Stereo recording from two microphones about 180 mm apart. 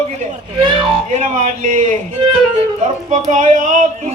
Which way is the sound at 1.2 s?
45° right (ahead or behind).